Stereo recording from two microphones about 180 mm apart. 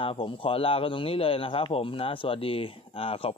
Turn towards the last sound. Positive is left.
turn(degrees=30)  # may be behind; listen again after turning